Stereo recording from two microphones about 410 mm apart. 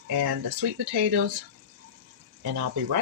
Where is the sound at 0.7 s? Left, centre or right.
Right.